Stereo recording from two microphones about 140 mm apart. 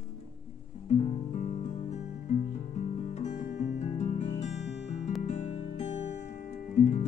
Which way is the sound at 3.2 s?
55° left (ahead or behind).